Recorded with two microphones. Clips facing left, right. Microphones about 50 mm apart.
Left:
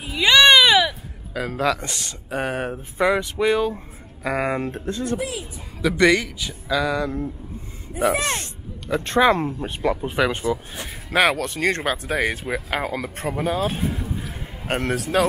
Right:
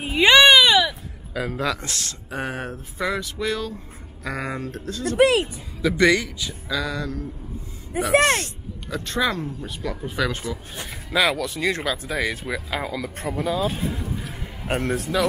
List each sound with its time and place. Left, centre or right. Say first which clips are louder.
0.0 s a sound: right 2 dB; right
0.4 s baby cry: left 3 dB; centre
1.9 s speech: left 1 dB; centre
2.7 s speech: left 6 dB; left
4.5 s speech: left 5 dB; left
5.2 s speech: right 12 dB; right
5.8 s speech: left 1 dB; centre
7.0 s speech: left 5 dB; left
8.0 s speech: left 4 dB; right
8.9 s speech: left 7 dB; left
11.1 s speech: left 2 dB; left
13.7 s speech: left 1 dB; centre